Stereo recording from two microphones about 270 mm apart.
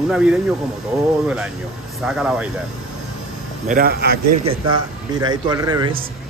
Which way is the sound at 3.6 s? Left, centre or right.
Right.